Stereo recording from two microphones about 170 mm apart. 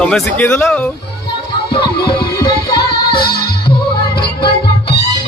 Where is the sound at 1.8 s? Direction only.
65° left (ahead or behind).